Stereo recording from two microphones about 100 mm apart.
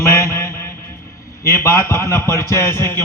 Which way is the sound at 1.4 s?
30° left (ahead or behind).